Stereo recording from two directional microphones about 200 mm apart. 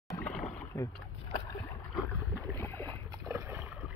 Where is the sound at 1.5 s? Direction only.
10° left (ahead or behind).